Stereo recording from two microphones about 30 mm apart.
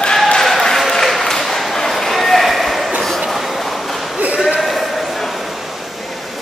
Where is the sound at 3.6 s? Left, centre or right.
Centre.